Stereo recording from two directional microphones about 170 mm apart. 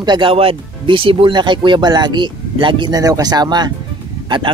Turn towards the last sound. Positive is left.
turn(degrees=-30)  # may be behind; listen again after turning